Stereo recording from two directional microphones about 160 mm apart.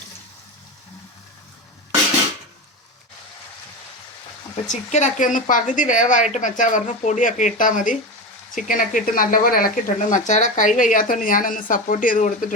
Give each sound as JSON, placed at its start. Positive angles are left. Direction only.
{"t": 4.7, "sound": "a woman's voice", "side_deg": 45}
{"t": 10.2, "sound": "speech", "side_deg": 50}